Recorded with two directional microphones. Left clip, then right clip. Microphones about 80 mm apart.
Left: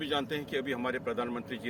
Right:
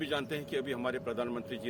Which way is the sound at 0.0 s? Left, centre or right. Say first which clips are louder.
Left 2 dB; right.